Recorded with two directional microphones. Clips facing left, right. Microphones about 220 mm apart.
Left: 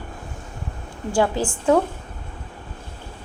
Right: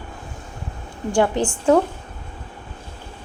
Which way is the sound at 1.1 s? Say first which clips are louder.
Right 2 dB; 5° left (ahead or behind).